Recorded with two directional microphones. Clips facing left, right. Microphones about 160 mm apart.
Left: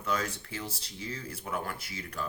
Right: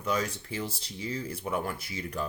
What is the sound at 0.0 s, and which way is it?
Speech, 15° right (ahead or behind).